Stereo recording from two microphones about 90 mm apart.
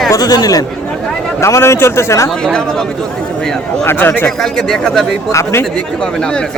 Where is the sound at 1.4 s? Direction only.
35° left (ahead or behind).